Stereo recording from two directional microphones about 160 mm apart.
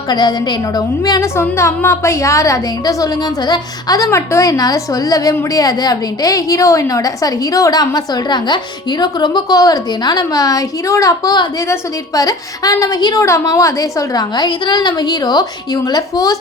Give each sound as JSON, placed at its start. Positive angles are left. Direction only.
{"t": 0.1, "sound": "a woman's voice", "side_deg": 25}